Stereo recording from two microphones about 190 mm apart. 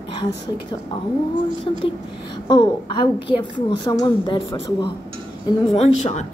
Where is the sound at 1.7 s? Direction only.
25° left (ahead or behind).